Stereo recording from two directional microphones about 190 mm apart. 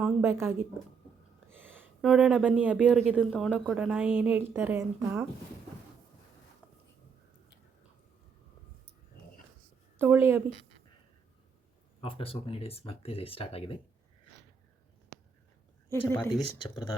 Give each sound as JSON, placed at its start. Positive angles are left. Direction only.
{"t": 0.0, "sound": "a woman's voice", "side_deg": -10}
{"t": 10.0, "sound": "a woman's voice", "side_deg": -15}
{"t": 12.0, "sound": "speech", "side_deg": 30}
{"t": 16.0, "sound": "speech", "side_deg": 10}